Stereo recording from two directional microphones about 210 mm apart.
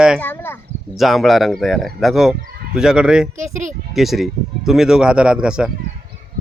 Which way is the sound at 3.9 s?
Centre (ahead or behind).